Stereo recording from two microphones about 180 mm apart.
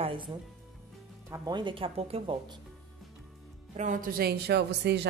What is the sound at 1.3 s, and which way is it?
A woman's voice, 20° right (ahead or behind).